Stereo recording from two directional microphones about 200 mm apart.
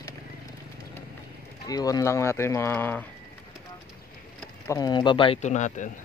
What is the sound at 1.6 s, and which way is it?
Speech, 20° left (ahead or behind).